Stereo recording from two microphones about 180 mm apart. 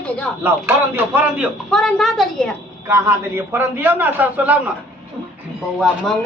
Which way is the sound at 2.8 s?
15° right (ahead or behind).